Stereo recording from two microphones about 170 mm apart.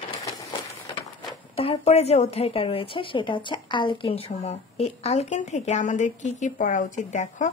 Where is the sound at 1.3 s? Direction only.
35° left (ahead or behind).